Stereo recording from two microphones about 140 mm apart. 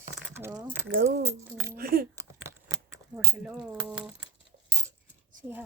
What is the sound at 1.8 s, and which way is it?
Speech, 90° right.